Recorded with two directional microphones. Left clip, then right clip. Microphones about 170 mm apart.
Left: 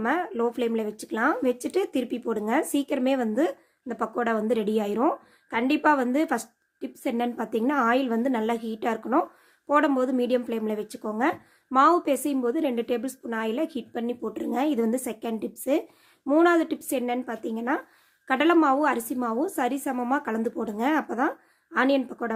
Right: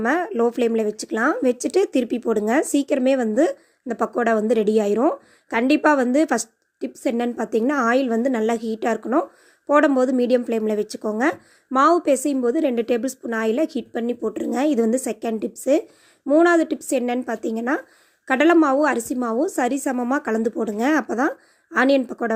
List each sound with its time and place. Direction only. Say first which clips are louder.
0.0 s speech: right 6 dB; 30° right (ahead or behind)